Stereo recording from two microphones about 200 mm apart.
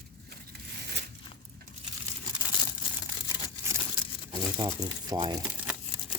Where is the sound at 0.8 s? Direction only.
55° right (ahead or behind).